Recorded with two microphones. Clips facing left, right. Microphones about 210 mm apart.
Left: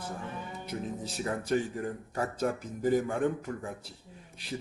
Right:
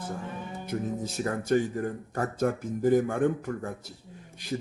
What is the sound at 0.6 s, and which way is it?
Speech, 50° right (ahead or behind).